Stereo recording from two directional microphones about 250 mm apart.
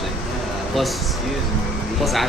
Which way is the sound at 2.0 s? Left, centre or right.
Centre.